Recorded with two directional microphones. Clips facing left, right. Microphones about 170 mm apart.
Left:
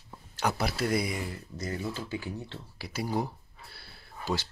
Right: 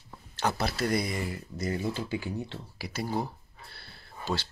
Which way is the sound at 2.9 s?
10° left (ahead or behind).